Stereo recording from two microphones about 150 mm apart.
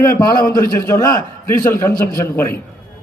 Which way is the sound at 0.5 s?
20° left (ahead or behind).